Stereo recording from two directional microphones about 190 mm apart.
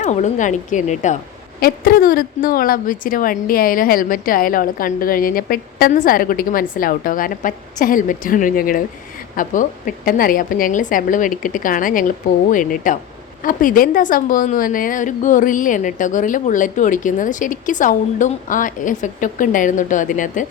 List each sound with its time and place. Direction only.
0.0 s a woman's voice: 40° left (ahead or behind)
1.6 s a woman's voice: 50° left (ahead or behind)